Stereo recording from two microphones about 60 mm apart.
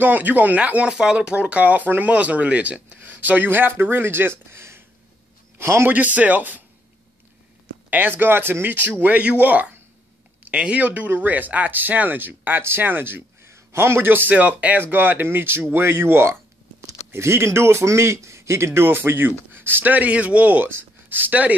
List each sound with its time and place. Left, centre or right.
0.0 s speech: right
5.9 s speech: right
7.9 s speech: right
14.3 s a man's voice: right